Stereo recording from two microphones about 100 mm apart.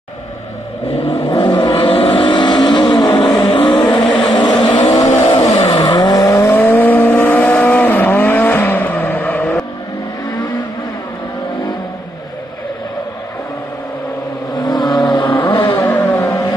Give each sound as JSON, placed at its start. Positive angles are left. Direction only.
{"t": 1.1, "sound": "vehicle", "side_deg": 60}
{"t": 3.4, "sound": "vehicle", "side_deg": 60}
{"t": 4.9, "sound": "vehicle", "side_deg": 85}
{"t": 5.8, "sound": "vehicle", "side_deg": 45}
{"t": 14.6, "sound": "vehicle", "side_deg": 45}
{"t": 15.7, "sound": "vehicle", "side_deg": 15}